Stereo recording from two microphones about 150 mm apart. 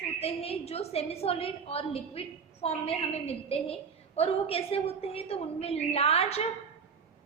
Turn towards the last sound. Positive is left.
turn(degrees=45)  # may be behind; listen again after turning